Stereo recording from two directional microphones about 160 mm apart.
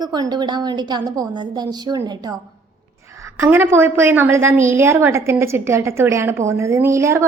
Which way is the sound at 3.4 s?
15° right (ahead or behind).